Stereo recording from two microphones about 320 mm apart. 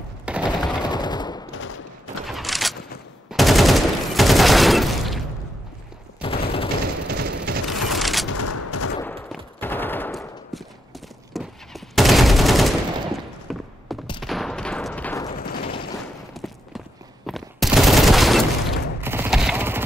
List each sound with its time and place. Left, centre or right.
0.2 s machine gun: centre
0.7 s machine gun: centre
2.2 s a sound: centre
3.3 s fusillade: centre
6.2 s fusillade: centre
7.1 s a sound: right
7.9 s a sound: centre
8.4 s fusillade: left
9.0 s machine gun: centre
11.3 s fusillade: centre
14.2 s gunshot: centre
16.3 s a sound: centre
17.3 s fusillade: centre